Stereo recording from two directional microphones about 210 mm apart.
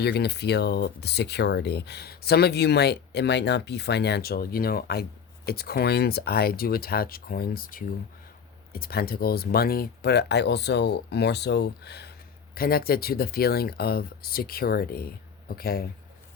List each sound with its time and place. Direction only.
0.0 s speech: 50° left (ahead or behind)